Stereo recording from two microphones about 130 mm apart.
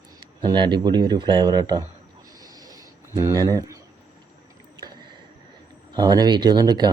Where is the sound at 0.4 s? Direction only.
35° right (ahead or behind).